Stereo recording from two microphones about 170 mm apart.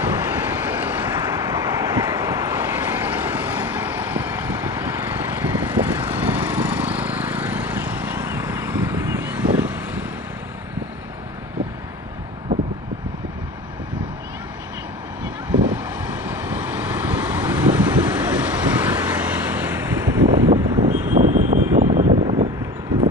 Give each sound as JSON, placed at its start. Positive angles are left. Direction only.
{"t": 0.0, "sound": "vehicle", "side_deg": -15}
{"t": 5.9, "sound": "vehicle", "side_deg": -30}
{"t": 6.3, "sound": "vehicle", "side_deg": -10}
{"t": 15.7, "sound": "vehicle", "side_deg": -10}
{"t": 20.4, "sound": "vehicle", "side_deg": -35}